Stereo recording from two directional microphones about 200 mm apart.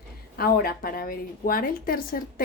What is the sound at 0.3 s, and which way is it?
A woman's voice, 50° left (ahead or behind).